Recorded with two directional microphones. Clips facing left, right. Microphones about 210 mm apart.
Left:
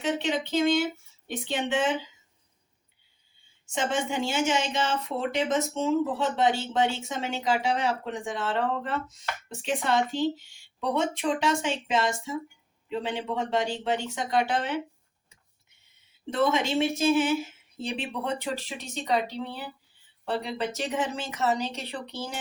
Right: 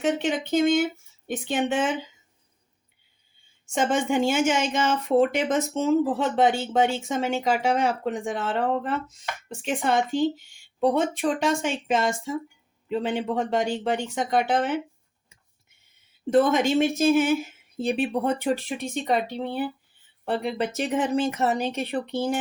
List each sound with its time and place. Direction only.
0.0 s speech: 50° right (ahead or behind)
3.8 s speech: 50° right (ahead or behind)
16.3 s speech: 50° right (ahead or behind)